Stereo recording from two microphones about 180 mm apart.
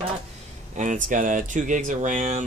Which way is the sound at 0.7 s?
45° right (ahead or behind).